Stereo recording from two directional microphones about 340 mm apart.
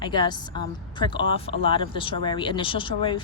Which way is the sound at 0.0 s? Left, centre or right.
Centre.